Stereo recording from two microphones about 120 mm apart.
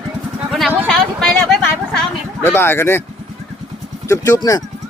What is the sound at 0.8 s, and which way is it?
Speech, 5° left (ahead or behind).